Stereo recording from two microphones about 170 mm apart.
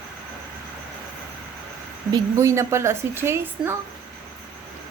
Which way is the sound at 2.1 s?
15° right (ahead or behind).